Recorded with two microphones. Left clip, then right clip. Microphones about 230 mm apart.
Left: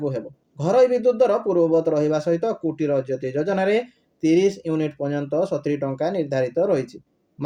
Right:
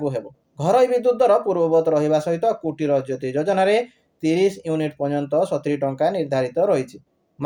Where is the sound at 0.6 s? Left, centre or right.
Right.